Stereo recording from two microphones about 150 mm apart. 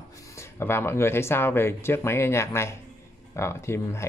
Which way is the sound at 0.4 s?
15° left (ahead or behind).